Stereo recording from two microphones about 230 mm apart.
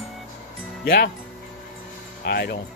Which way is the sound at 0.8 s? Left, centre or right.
Left.